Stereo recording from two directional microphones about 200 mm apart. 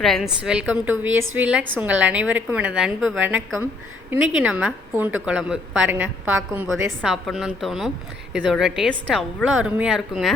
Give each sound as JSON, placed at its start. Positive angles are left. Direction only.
{"t": 0.0, "sound": "a woman's voice", "side_deg": 0}
{"t": 1.0, "sound": "a woman's voice", "side_deg": -90}
{"t": 1.4, "sound": "a woman's voice", "side_deg": -5}